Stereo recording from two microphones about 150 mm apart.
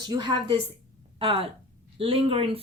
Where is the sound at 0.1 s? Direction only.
30° right (ahead or behind).